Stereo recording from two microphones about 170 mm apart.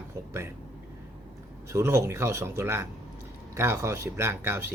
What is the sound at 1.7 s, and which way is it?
Speech, 15° right (ahead or behind).